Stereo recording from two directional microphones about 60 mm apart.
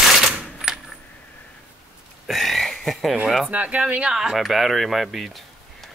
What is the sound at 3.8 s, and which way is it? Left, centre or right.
Speech, centre.